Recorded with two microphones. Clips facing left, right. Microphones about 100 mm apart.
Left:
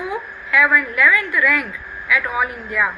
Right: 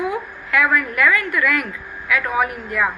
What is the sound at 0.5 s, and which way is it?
A woman's voice, 50° right (ahead or behind).